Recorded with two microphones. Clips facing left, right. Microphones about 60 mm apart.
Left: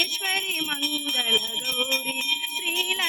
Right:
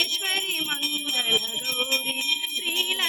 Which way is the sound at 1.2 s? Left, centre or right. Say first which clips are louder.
Left 1 dB; centre.